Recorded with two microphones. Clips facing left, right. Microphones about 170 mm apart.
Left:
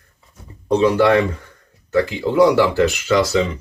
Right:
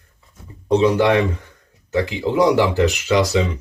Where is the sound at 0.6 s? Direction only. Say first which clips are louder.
Left 1 dB; 15° right (ahead or behind).